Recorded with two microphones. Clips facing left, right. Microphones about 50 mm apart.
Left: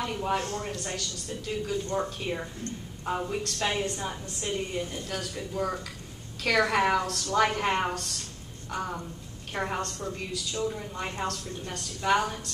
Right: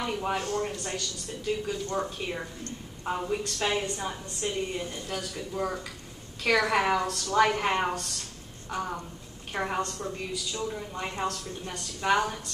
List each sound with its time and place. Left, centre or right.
0.0 s a woman's voice: centre
2.2 s a woman's voice: centre